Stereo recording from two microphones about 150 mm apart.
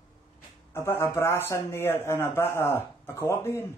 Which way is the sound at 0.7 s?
15° left (ahead or behind).